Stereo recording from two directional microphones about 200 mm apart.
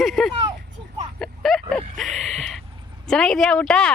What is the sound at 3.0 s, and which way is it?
Speech, 5° left (ahead or behind).